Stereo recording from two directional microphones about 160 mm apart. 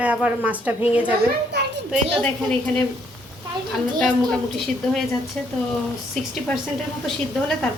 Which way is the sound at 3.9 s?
5° left (ahead or behind).